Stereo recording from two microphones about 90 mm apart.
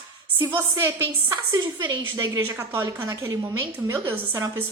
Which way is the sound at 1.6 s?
50° right (ahead or behind).